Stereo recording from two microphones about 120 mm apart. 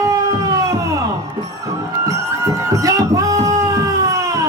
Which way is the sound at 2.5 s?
30° right (ahead or behind).